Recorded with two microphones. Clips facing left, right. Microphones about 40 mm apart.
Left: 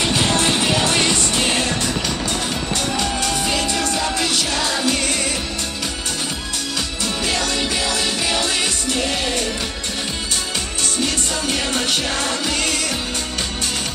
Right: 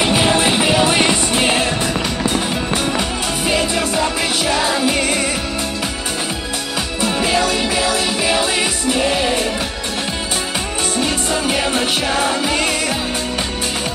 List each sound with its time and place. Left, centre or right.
0.0 s music: centre
7.0 s music: centre
11.0 s music: centre